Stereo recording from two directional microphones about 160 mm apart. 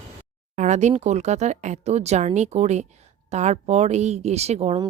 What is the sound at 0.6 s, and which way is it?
Speech, 50° right (ahead or behind).